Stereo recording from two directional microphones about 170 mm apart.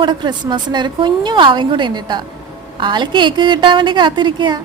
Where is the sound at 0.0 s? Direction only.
25° right (ahead or behind).